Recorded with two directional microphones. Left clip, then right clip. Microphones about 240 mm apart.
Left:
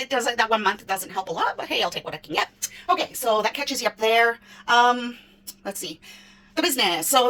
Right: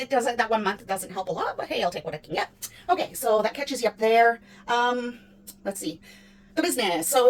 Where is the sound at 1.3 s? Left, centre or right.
Centre.